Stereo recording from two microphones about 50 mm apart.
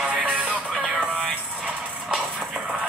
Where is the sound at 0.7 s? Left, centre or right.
Centre.